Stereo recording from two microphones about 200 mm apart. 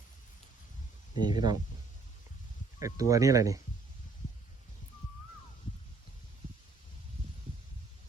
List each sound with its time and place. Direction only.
1.1 s speech: 20° right (ahead or behind)
2.7 s speech: 15° right (ahead or behind)